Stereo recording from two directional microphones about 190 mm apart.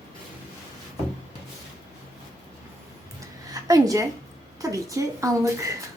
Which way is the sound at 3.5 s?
20° right (ahead or behind).